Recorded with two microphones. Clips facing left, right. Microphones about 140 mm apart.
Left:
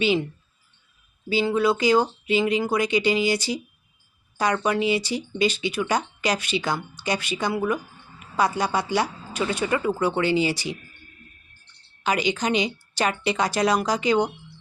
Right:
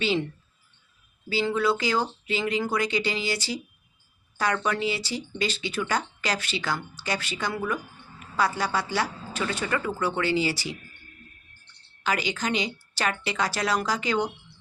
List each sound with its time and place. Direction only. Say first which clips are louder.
0.0 s speech: left 4 dB; 15° left (ahead or behind)
1.3 s speech: left 3 dB; 15° left (ahead or behind)
12.0 s a woman's voice: left 4 dB; 20° left (ahead or behind)